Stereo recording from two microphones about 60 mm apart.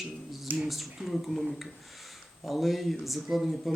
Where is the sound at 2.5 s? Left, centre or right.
Centre.